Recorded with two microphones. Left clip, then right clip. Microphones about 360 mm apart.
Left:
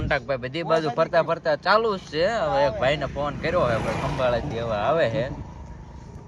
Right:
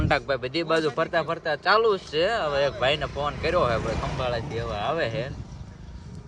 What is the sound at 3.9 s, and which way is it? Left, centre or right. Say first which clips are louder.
Speech: left 3 dB; left.